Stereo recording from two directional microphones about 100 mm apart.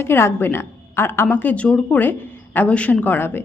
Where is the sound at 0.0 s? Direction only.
25° left (ahead or behind).